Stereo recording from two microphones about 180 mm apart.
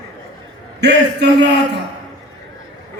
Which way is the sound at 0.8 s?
70° right (ahead or behind).